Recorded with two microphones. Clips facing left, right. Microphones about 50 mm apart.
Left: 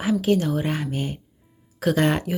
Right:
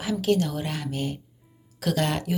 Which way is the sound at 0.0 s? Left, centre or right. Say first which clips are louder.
Left 3 dB; centre.